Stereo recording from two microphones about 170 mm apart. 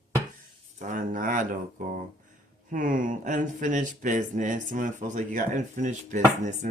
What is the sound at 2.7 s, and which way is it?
Speech, 50° right (ahead or behind).